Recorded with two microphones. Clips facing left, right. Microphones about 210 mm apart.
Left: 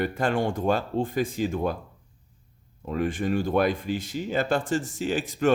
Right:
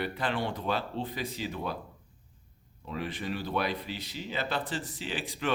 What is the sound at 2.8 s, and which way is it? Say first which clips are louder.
Speech: left 9 dB; 50° left (ahead or behind).